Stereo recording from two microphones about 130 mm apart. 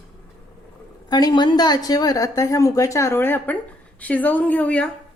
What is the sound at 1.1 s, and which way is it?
A woman's voice, 35° left (ahead or behind).